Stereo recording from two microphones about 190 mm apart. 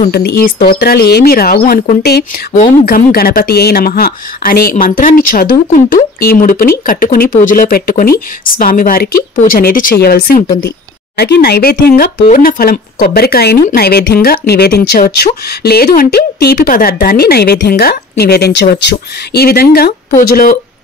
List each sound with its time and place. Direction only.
0.1 s speech: 55° left (ahead or behind)
11.1 s speech: 60° left (ahead or behind)